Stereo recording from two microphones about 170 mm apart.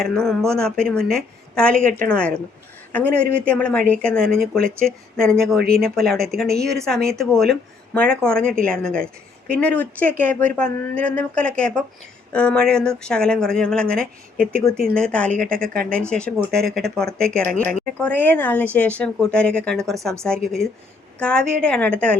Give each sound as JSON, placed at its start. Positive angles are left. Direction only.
{"t": 0.0, "sound": "a woman's voice", "side_deg": 5}
{"t": 4.2, "sound": "speech", "side_deg": -60}
{"t": 4.8, "sound": "a woman's voice", "side_deg": 5}